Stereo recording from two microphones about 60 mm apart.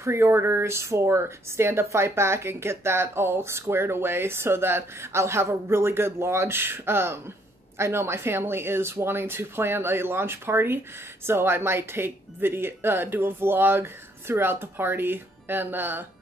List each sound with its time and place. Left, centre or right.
0.0 s speech: right